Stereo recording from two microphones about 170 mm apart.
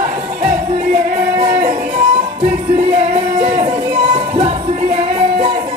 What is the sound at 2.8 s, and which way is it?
Music, 35° right (ahead or behind).